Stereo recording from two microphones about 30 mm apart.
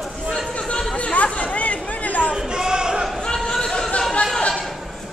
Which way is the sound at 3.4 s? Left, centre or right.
Left.